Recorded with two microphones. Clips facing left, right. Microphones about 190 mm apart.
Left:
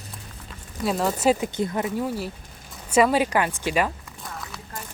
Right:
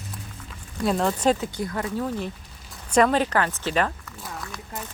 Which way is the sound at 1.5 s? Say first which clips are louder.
Left 3 dB; 20° left (ahead or behind).